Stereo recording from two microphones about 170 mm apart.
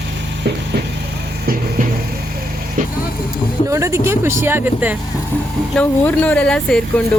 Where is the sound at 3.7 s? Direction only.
20° right (ahead or behind).